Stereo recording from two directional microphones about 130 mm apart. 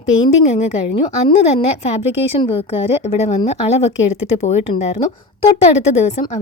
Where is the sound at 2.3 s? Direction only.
45° left (ahead or behind).